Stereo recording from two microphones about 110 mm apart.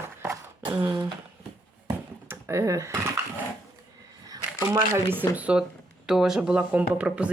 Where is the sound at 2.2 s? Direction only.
20° right (ahead or behind).